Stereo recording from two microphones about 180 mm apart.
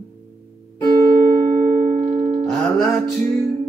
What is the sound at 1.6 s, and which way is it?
Music, 40° right (ahead or behind).